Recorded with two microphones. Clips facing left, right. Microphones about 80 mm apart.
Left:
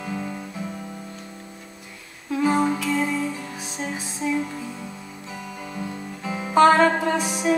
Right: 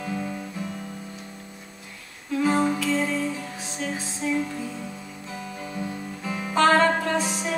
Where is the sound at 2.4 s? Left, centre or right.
Centre.